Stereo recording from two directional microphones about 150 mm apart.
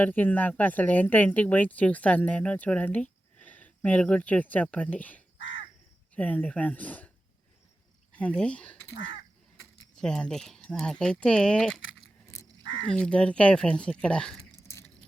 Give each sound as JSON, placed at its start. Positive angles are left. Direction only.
{"t": 0.0, "sound": "speech", "side_deg": 10}
{"t": 8.1, "sound": "speech", "side_deg": 10}
{"t": 12.9, "sound": "speech", "side_deg": 5}
{"t": 14.6, "sound": "a sound", "side_deg": 20}